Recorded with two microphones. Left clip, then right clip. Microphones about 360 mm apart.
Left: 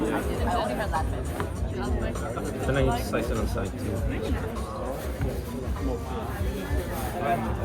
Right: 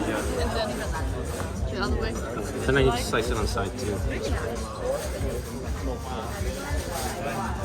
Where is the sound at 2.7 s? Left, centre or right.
Right.